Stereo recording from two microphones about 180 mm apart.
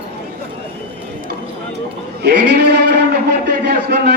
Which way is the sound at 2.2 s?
70° right (ahead or behind).